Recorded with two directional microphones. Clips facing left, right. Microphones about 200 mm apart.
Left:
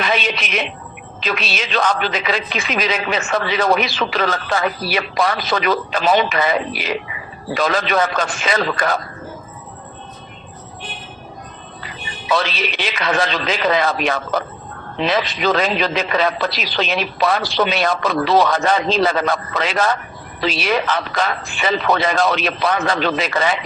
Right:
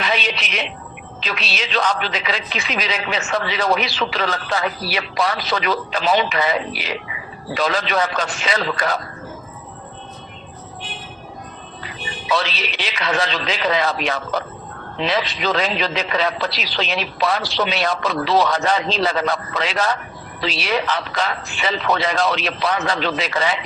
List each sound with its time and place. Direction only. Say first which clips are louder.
0.0 s music: left 3 dB; 50° left (ahead or behind)
1.2 s a man's voice: left 4 dB; 50° left (ahead or behind)
12.3 s a man's voice: left 3 dB; 50° left (ahead or behind)